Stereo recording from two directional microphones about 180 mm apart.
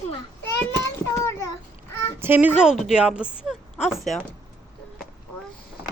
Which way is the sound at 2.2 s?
10° right (ahead or behind).